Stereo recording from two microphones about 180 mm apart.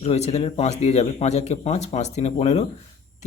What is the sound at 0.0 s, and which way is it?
A man's voice, 35° left (ahead or behind).